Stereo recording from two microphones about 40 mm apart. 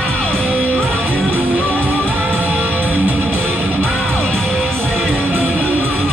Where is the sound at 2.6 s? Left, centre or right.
Right.